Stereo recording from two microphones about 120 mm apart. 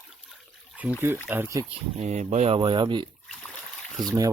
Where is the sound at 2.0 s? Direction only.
65° right (ahead or behind).